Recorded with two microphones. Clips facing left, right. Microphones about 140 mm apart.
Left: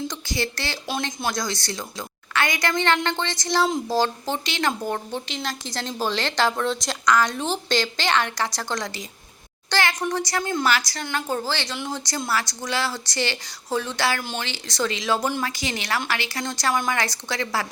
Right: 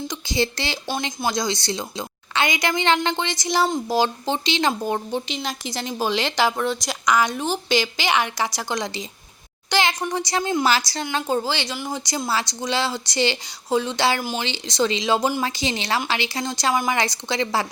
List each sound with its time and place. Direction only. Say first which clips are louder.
0.3 s a woman's voice: right 7 dB; 20° right (ahead or behind)
10.7 s speech: right 2 dB; 30° right (ahead or behind)
11.0 s speech: right 3 dB; 20° right (ahead or behind)
12.3 s speech: right 2 dB; 25° right (ahead or behind)
14.2 s speech: right 4 dB; 10° right (ahead or behind)
14.4 s speech: right 4 dB; 20° right (ahead or behind)